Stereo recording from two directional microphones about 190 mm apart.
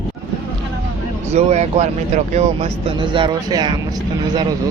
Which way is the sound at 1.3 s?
35° right (ahead or behind).